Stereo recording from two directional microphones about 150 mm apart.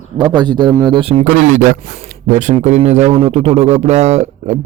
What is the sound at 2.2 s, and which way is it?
A man's voice, 50° right (ahead or behind).